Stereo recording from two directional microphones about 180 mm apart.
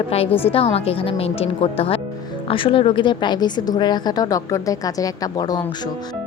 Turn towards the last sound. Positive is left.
turn(degrees=20)  # may be behind; listen again after turning